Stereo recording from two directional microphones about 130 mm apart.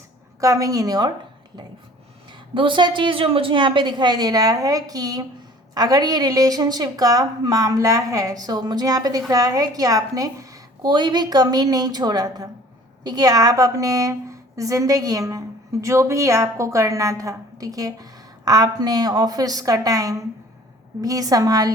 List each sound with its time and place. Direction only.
0.3 s a woman's voice: 25° right (ahead or behind)
2.6 s a woman's voice: 40° right (ahead or behind)